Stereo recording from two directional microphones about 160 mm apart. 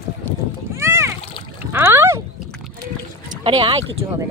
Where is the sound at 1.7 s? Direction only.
15° right (ahead or behind).